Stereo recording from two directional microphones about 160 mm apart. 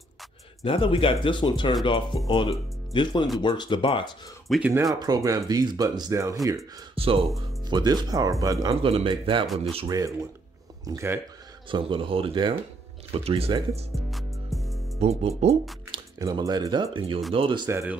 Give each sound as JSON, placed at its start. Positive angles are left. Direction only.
{"t": 0.7, "sound": "speech", "side_deg": 35}
{"t": 4.5, "sound": "speech", "side_deg": -10}
{"t": 4.9, "sound": "speech", "side_deg": -25}
{"t": 7.0, "sound": "speech", "side_deg": -35}
{"t": 7.7, "sound": "speech", "side_deg": -25}
{"t": 8.8, "sound": "speech", "side_deg": -35}
{"t": 11.7, "sound": "speech", "side_deg": -35}
{"t": 13.9, "sound": "music", "side_deg": 0}
{"t": 15.0, "sound": "speech", "side_deg": -40}
{"t": 15.9, "sound": "speech", "side_deg": -25}
{"t": 17.6, "sound": "speech", "side_deg": -15}